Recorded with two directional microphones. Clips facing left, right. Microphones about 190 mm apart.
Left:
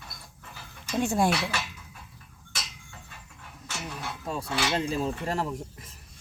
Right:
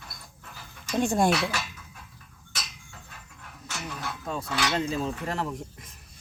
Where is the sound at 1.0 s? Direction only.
5° left (ahead or behind).